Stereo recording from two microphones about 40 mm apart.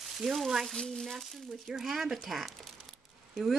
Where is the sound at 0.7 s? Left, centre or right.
Centre.